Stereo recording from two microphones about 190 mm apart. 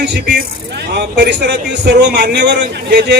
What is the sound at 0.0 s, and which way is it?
A man's voice, 65° right (ahead or behind).